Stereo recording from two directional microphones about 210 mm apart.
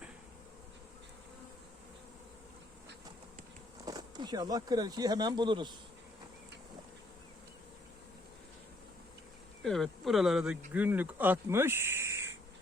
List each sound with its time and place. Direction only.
3.8 s speech: 20° right (ahead or behind)
9.6 s speech: centre (ahead or behind)